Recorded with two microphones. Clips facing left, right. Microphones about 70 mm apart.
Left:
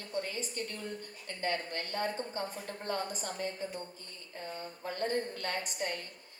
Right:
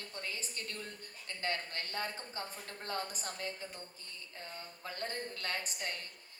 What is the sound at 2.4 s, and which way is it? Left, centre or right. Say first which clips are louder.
A woman's voice: left 6 dB; left.